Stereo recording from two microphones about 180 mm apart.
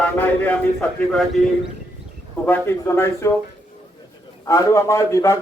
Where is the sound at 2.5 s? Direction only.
15° left (ahead or behind).